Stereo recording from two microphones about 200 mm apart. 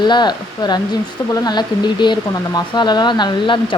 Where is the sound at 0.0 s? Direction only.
20° left (ahead or behind).